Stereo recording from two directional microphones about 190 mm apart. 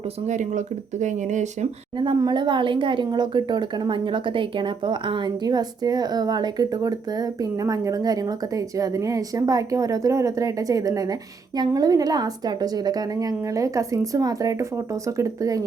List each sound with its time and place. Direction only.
0.3 s speech: 40° right (ahead or behind)
2.0 s speech: 25° right (ahead or behind)